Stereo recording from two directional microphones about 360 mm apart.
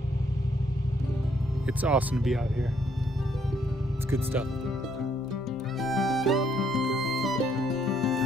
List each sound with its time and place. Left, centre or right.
1.8 s speech: centre
4.1 s speech: centre
5.8 s music: centre